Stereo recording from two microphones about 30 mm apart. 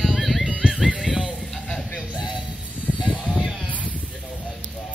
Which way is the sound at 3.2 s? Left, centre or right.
Right.